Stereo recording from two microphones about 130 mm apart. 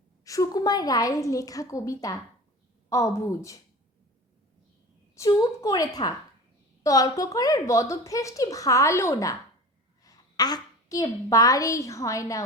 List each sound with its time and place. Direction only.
0.3 s a woman's voice: 25° left (ahead or behind)
5.1 s a woman's voice: 25° left (ahead or behind)